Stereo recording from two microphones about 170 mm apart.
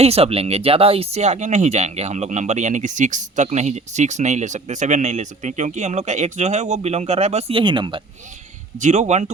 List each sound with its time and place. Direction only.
0.0 s speech: 35° right (ahead or behind)
8.8 s speech: 45° right (ahead or behind)